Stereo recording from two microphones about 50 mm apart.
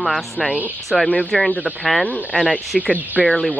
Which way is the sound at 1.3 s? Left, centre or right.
Centre.